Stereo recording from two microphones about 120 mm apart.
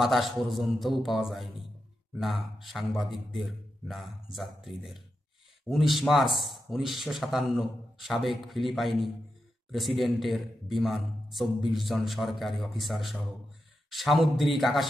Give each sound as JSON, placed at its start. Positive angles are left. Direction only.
{"t": 0.0, "sound": "a man's voice", "side_deg": 0}